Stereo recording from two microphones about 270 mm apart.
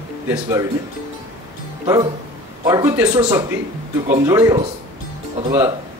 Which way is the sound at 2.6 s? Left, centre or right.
Centre.